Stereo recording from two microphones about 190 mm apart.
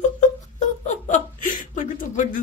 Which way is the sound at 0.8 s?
40° left (ahead or behind).